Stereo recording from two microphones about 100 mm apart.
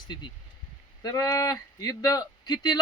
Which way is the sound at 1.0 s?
35° left (ahead or behind).